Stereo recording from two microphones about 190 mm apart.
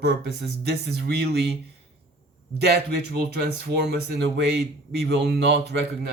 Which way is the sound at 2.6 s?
60° right (ahead or behind).